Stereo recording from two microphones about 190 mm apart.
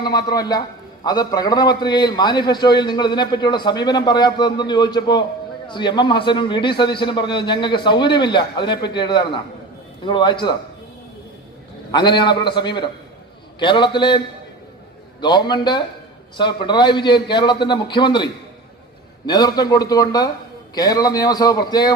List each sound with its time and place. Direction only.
0.3 s a man's voice: 20° left (ahead or behind)
11.9 s a man's voice: 25° left (ahead or behind)
15.2 s a man's voice: 25° left (ahead or behind)